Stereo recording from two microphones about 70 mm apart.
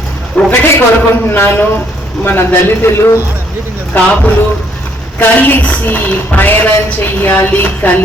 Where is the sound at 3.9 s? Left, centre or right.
Left.